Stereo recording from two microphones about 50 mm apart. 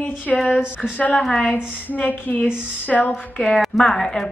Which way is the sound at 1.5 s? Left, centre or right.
Left.